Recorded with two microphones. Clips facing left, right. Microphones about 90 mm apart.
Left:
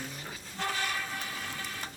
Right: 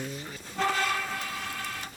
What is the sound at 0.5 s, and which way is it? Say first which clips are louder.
Train: right 6 dB; 70° right (ahead or behind).